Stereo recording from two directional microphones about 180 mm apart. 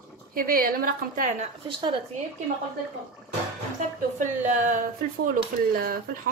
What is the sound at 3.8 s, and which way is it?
A woman's voice, 45° right (ahead or behind).